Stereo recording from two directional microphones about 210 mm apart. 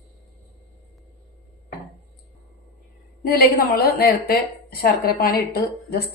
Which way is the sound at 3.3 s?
45° left (ahead or behind).